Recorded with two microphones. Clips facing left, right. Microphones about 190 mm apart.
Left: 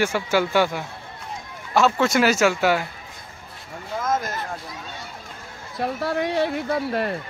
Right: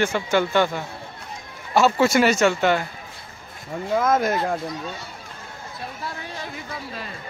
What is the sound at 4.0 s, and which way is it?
Speech, 60° right (ahead or behind).